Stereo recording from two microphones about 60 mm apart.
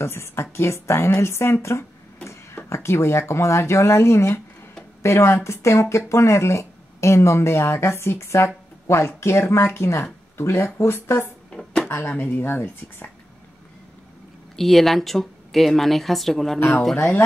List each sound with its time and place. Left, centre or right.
0.0 s speech: left
11.5 s a sound: centre
11.9 s speech: left
14.6 s speech: centre
16.5 s speech: left